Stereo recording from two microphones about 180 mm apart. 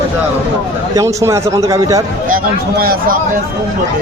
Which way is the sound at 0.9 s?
15° right (ahead or behind).